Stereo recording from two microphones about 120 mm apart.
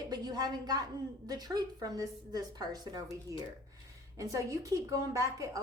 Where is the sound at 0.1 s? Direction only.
35° right (ahead or behind).